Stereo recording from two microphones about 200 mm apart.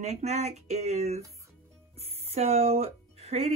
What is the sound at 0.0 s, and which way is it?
Speech, 30° right (ahead or behind).